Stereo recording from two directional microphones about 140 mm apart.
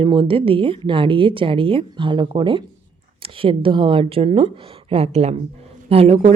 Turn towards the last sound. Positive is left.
turn(degrees=-45)  # may be behind; listen again after turning